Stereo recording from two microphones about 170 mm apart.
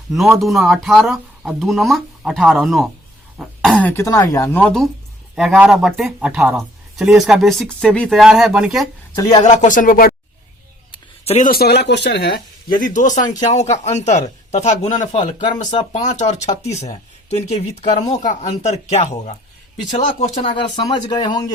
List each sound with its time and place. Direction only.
0.1 s speech: centre (ahead or behind)
9.1 s speech: 20° left (ahead or behind)
9.4 s speech: 45° left (ahead or behind)
10.9 s a sound: 35° left (ahead or behind)
11.4 s speech: 65° left (ahead or behind); by 21.4 s 25° left (ahead or behind)